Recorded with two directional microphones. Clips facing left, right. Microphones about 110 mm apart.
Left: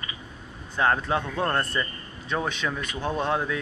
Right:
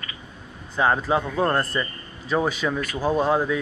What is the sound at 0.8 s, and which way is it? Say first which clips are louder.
A man's voice: right 3 dB; 5° right (ahead or behind).